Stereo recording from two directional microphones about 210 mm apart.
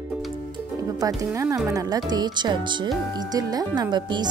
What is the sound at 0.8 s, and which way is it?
Speech, 15° right (ahead or behind).